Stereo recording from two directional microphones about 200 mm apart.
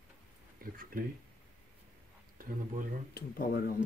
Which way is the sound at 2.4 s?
45° right (ahead or behind).